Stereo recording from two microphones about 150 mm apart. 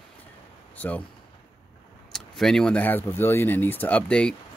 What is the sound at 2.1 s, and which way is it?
Speech, 5° left (ahead or behind).